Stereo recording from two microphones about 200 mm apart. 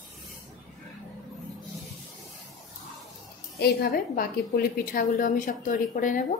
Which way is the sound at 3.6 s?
50° left (ahead or behind).